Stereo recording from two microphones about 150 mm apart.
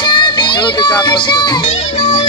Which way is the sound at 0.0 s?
30° left (ahead or behind).